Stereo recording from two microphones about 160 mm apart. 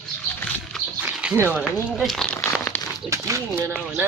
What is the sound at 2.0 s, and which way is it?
Crumpling, 5° left (ahead or behind).